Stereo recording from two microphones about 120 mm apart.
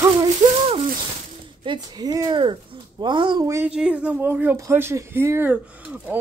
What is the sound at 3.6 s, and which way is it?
Speech, 10° right (ahead or behind).